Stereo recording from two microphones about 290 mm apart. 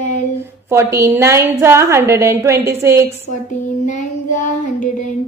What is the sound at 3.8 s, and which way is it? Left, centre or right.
Child singing, left.